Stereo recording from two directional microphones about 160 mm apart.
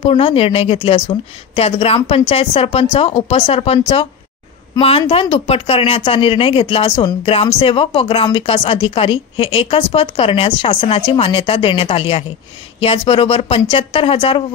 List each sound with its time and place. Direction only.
0.0 s speech: 35° left (ahead or behind)